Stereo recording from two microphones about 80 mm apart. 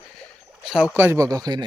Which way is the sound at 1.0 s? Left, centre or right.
Right.